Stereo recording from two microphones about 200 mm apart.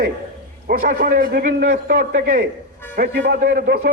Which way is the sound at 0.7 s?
50° right (ahead or behind).